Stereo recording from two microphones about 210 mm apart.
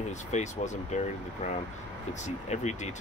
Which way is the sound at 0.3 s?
35° left (ahead or behind).